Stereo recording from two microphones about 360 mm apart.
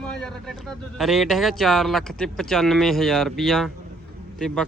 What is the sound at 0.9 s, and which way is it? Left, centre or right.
Speech, centre.